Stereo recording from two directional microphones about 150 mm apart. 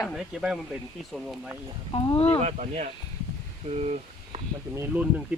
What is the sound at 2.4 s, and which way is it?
Speech, 50° right (ahead or behind).